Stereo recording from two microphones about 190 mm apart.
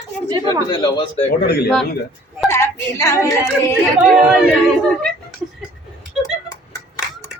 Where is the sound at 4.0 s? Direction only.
Centre (ahead or behind).